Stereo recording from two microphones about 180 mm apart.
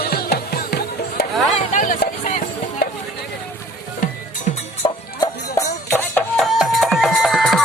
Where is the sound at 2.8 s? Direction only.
60° left (ahead or behind).